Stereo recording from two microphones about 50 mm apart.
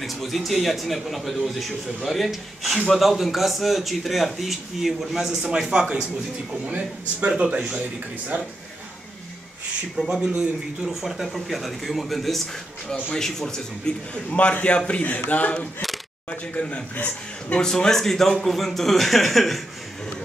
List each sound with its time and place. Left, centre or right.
0.0 s a man's voice: centre
6.6 s speech: right
9.9 s a man's voice: centre
14.3 s a man's voice: left
17.6 s a man's voice: centre